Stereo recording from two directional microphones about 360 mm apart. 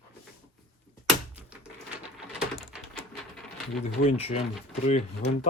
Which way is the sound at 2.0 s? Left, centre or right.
Centre.